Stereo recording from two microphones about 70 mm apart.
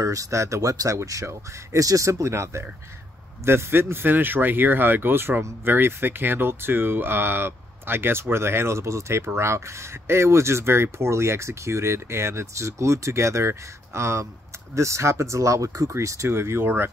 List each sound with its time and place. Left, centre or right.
0.0 s speech: right